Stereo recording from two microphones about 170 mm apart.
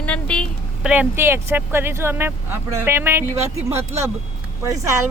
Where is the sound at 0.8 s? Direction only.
5° right (ahead or behind).